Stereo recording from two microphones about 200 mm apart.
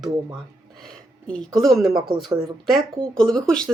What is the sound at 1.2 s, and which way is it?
Speech, 5° left (ahead or behind).